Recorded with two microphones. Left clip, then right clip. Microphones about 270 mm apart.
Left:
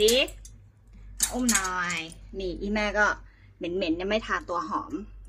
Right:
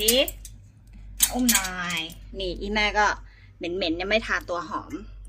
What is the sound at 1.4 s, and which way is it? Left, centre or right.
A woman's voice, centre.